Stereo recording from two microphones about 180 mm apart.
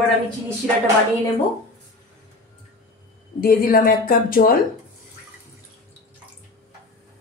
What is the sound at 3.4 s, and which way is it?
Speech, 55° left (ahead or behind).